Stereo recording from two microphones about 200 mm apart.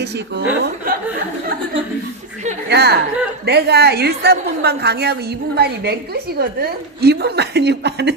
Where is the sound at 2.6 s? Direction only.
55° right (ahead or behind).